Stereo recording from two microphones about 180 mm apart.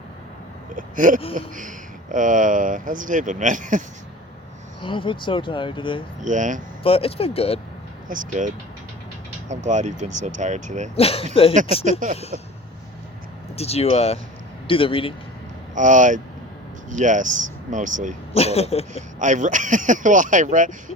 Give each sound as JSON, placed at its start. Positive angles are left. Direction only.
{"t": 0.8, "sound": "speech", "side_deg": -45}
{"t": 4.8, "sound": "speech", "side_deg": 25}
{"t": 6.2, "sound": "speech", "side_deg": -45}
{"t": 6.8, "sound": "speech", "side_deg": 30}
{"t": 8.0, "sound": "speech", "side_deg": -45}
{"t": 10.9, "sound": "speech", "side_deg": 35}
{"t": 11.9, "sound": "speech", "side_deg": -45}
{"t": 13.6, "sound": "speech", "side_deg": 35}
{"t": 15.7, "sound": "speech", "side_deg": -45}
{"t": 18.3, "sound": "speech", "side_deg": 35}
{"t": 19.2, "sound": "speech", "side_deg": -45}